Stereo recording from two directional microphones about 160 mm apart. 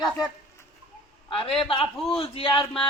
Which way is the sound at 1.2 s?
35° left (ahead or behind).